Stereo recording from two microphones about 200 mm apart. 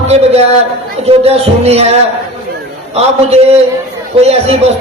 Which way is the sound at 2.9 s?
30° right (ahead or behind).